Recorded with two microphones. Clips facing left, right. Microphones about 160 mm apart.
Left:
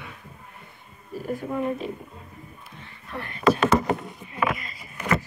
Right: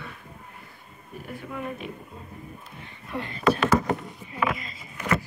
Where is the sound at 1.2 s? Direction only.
35° left (ahead or behind).